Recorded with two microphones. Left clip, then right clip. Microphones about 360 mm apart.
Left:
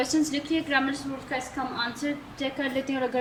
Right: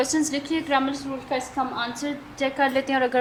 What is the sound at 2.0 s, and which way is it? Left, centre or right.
Speech, centre.